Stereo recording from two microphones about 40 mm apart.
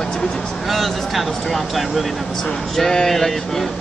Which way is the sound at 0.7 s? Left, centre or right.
Centre.